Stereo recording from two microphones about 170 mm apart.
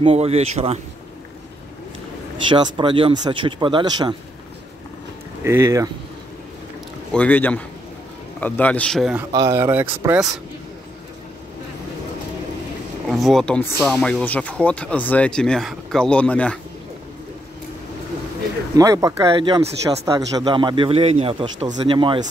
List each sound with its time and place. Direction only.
0.0 s speech: 35° right (ahead or behind)
2.5 s speech: 30° right (ahead or behind)
5.4 s speech: 15° right (ahead or behind)
7.1 s speech: 10° left (ahead or behind)
9.3 s speech: 20° right (ahead or behind)
13.1 s speech: centre (ahead or behind)
18.8 s speech: 20° right (ahead or behind)